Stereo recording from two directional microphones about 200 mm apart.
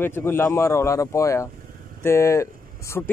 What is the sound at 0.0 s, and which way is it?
Speech, 10° left (ahead or behind).